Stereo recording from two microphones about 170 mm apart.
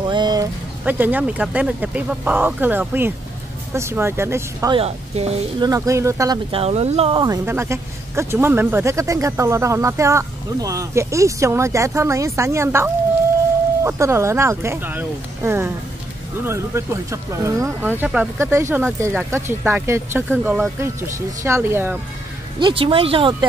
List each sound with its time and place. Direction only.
0.0 s vehicle: 25° right (ahead or behind)
0.8 s speech: 10° right (ahead or behind)
4.7 s speech: 35° right (ahead or behind)
5.6 s speech: 20° right (ahead or behind)
6.5 s speech: 35° right (ahead or behind)
7.4 s speech: 15° right (ahead or behind)
21.4 s speech: 15° right (ahead or behind)
22.6 s speech: 30° right (ahead or behind)